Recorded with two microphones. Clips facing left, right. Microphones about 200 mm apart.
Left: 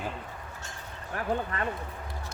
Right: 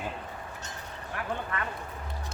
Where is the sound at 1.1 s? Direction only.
35° left (ahead or behind).